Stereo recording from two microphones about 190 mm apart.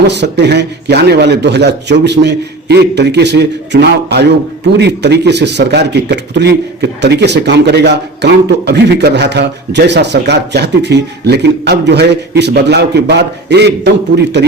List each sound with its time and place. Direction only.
0.1 s a man's voice: 65° right (ahead or behind)